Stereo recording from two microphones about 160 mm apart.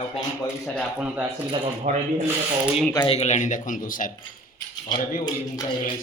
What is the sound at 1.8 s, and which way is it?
Speech, 45° right (ahead or behind).